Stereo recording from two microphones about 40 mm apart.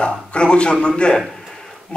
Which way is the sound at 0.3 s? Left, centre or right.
Left.